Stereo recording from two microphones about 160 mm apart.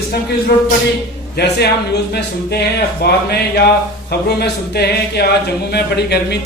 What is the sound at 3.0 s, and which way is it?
Speech, 75° left (ahead or behind).